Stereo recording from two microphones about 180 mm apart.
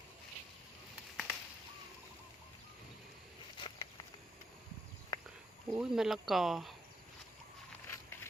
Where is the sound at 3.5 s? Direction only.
25° left (ahead or behind).